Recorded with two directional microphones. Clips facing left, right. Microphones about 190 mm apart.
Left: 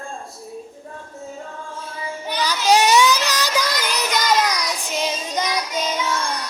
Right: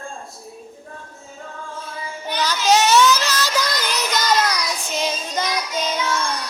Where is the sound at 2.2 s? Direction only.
10° left (ahead or behind).